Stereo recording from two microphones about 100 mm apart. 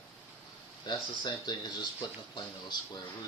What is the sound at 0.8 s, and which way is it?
Speech, 45° left (ahead or behind).